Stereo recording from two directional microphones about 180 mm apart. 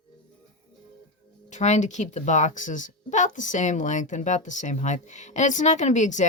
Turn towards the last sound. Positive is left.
turn(degrees=40)  # may be behind; listen again after turning